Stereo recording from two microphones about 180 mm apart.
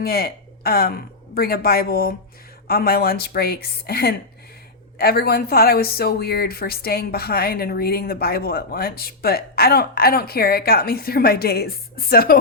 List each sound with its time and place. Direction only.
0.0 s a woman's voice: 55° left (ahead or behind)